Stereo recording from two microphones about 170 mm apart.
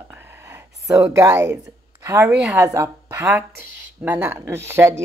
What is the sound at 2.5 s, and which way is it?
Speech, 15° right (ahead or behind).